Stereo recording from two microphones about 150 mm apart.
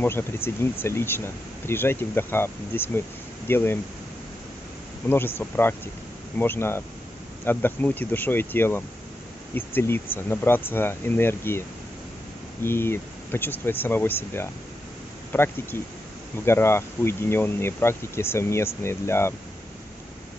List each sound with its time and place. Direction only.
0.0 s speech: 15° left (ahead or behind)
5.1 s speech: 15° left (ahead or behind)
12.6 s speech: 15° left (ahead or behind)